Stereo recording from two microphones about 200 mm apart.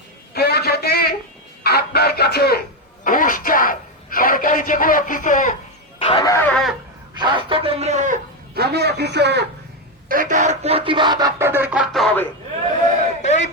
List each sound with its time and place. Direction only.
0.3 s a sound: 50° left (ahead or behind)
1.6 s speech: 50° left (ahead or behind)
6.0 s snicker: 25° left (ahead or behind)
6.2 s a sound: 10° left (ahead or behind)
7.1 s a man's voice: 25° right (ahead or behind)
8.6 s a man's voice: 55° right (ahead or behind)
10.1 s speech: 40° right (ahead or behind); by 12.3 s 5° left (ahead or behind)